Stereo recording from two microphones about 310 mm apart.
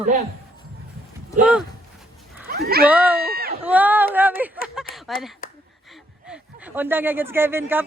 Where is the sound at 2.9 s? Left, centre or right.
Centre.